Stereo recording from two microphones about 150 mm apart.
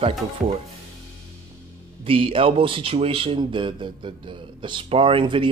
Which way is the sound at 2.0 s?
35° right (ahead or behind).